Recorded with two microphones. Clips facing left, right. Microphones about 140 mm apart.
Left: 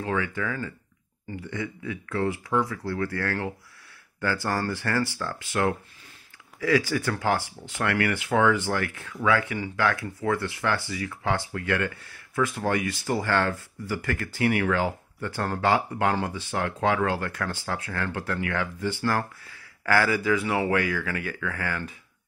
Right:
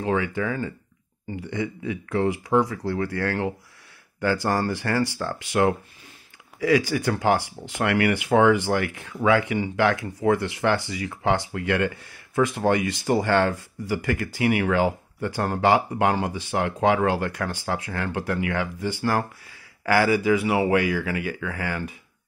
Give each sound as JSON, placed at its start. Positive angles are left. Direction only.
{"t": 0.0, "sound": "speech", "side_deg": -20}